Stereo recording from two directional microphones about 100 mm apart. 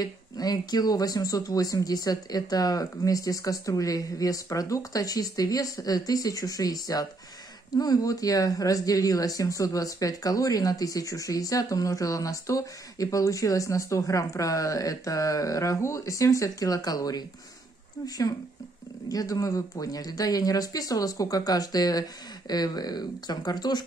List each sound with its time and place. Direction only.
0.0 s a woman's voice: 40° left (ahead or behind)